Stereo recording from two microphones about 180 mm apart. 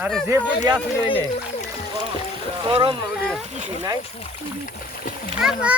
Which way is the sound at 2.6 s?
30° right (ahead or behind).